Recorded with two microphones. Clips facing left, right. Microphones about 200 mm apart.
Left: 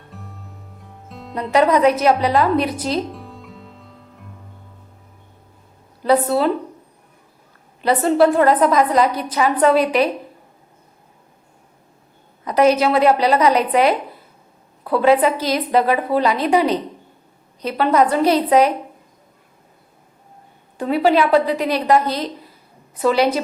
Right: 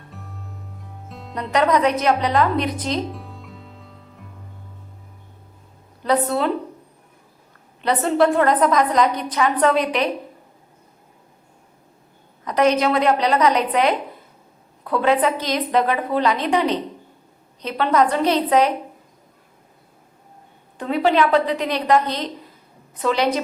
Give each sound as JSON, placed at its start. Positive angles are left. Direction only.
{"t": 0.1, "sound": "music", "side_deg": 0}
{"t": 6.0, "sound": "a woman's voice", "side_deg": 5}
{"t": 7.8, "sound": "a woman's voice", "side_deg": 5}
{"t": 12.5, "sound": "a woman's voice", "side_deg": 10}
{"t": 20.7, "sound": "a woman's voice", "side_deg": 10}